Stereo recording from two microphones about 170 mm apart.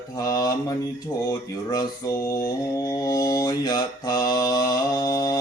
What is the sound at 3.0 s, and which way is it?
Mantra, 20° left (ahead or behind).